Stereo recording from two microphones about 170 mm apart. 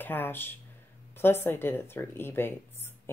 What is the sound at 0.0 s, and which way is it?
Speech, 10° left (ahead or behind).